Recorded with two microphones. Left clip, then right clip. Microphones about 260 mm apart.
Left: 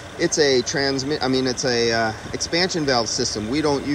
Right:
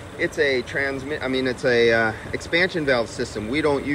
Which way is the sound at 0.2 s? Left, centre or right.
Centre.